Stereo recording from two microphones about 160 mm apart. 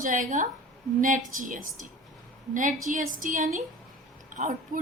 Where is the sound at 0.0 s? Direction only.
55° right (ahead or behind).